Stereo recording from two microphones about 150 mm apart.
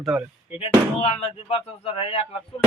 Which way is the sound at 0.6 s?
45° left (ahead or behind).